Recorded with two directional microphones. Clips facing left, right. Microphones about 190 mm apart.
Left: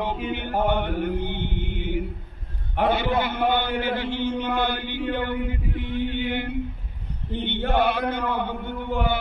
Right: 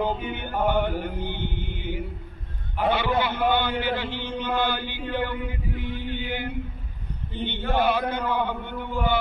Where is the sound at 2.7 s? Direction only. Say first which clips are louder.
Left 1 dB; 50° left (ahead or behind).